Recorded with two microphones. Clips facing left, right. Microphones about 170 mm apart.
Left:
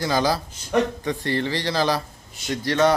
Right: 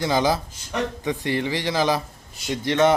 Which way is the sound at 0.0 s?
20° right (ahead or behind).